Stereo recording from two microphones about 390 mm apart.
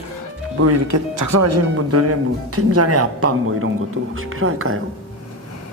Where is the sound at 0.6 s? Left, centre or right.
Right.